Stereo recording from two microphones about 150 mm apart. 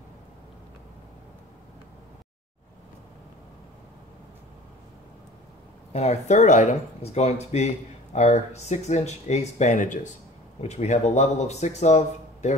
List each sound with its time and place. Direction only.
5.9 s speech: 50° left (ahead or behind)